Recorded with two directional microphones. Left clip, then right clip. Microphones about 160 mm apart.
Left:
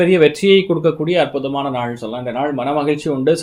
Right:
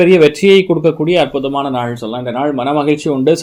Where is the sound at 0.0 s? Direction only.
35° right (ahead or behind).